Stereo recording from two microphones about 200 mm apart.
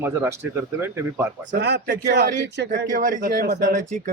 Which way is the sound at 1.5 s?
55° right (ahead or behind).